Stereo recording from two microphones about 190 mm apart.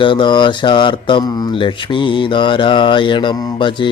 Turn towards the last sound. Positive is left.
turn(degrees=25)  # may be behind; listen again after turning